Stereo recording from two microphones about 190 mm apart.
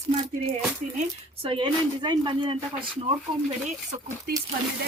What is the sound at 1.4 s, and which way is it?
Speech, 25° right (ahead or behind).